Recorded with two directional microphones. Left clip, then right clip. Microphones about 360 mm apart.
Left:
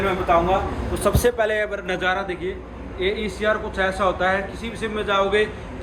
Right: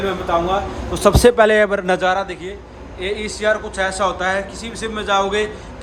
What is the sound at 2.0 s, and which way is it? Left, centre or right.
A man's voice, centre.